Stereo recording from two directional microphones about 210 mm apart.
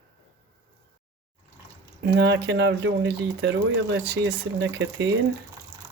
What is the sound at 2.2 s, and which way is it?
Speech, 55° right (ahead or behind).